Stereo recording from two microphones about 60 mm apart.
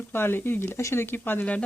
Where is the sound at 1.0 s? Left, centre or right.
Left.